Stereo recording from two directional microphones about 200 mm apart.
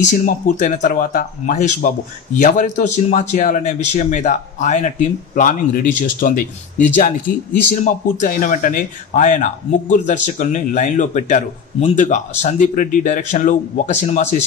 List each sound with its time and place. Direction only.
0.1 s speech: 40° left (ahead or behind)